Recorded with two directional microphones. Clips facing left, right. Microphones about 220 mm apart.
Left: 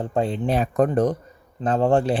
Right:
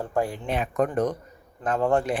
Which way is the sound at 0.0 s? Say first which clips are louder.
Left 3 dB; 20° left (ahead or behind).